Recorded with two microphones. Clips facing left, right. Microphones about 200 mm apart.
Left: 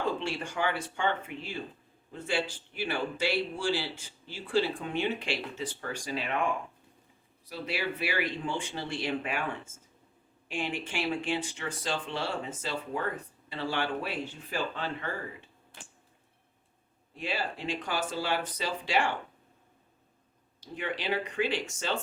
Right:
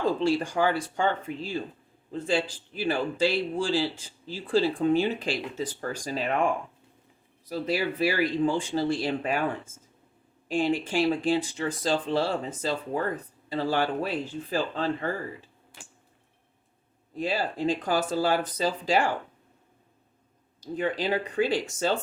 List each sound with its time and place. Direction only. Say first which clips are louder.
0.2 s speech: right 8 dB; 35° right (ahead or behind)
7.4 s speech: right 6 dB; 40° right (ahead or behind)
10.5 s speech: right 9 dB; 35° right (ahead or behind)
17.2 s speech: right 6 dB; 40° right (ahead or behind)
20.7 s speech: right 5 dB; 40° right (ahead or behind)